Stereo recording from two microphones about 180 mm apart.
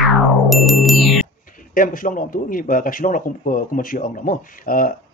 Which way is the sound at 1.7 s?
50° left (ahead or behind).